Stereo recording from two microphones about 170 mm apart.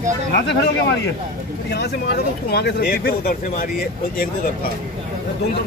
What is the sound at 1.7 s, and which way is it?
Speech, 70° left (ahead or behind).